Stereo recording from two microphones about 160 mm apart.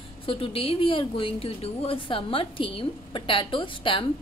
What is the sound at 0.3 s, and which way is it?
Speech, 35° left (ahead or behind).